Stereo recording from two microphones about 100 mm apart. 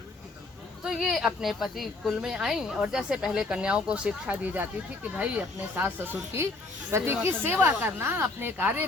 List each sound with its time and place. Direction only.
0.9 s a woman's voice: centre (ahead or behind); by 8.8 s 20° right (ahead or behind)